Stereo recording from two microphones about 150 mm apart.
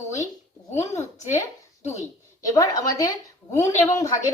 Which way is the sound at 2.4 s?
20° left (ahead or behind).